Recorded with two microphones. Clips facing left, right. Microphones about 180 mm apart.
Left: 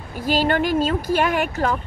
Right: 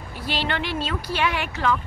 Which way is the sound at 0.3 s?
45° left (ahead or behind).